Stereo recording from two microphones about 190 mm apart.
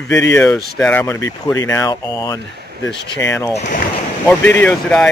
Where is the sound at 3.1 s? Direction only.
15° left (ahead or behind).